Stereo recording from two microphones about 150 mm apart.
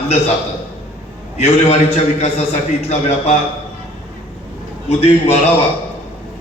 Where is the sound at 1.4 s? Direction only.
45° left (ahead or behind).